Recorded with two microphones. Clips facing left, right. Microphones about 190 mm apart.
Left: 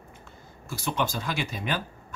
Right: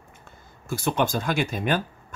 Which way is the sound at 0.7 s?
50° right (ahead or behind).